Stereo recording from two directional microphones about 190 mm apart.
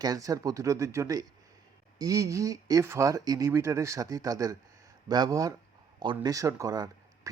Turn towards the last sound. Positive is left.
turn(degrees=-20)  # may be behind; listen again after turning